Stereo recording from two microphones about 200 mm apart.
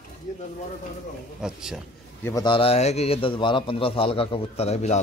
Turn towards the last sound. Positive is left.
turn(degrees=35)  # may be behind; listen again after turning